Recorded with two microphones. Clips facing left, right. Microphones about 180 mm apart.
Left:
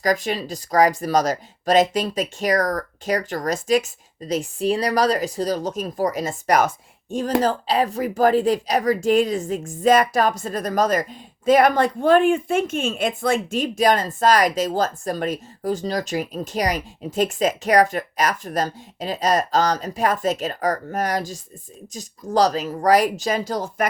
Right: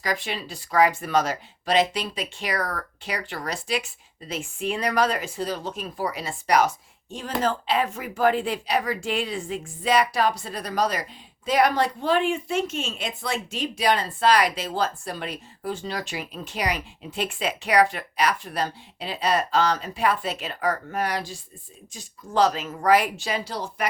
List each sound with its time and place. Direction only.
0.0 s speech: 45° left (ahead or behind)